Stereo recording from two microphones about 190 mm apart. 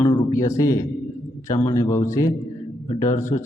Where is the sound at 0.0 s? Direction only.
20° left (ahead or behind).